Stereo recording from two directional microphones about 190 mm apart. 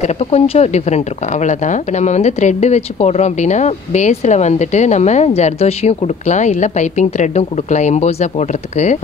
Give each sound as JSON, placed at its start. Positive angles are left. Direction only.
{"t": 0.0, "sound": "speech", "side_deg": 35}